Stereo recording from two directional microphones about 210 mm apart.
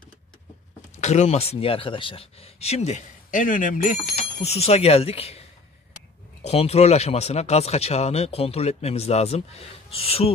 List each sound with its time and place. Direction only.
1.0 s speech: 30° left (ahead or behind)
6.4 s speech: 30° left (ahead or behind)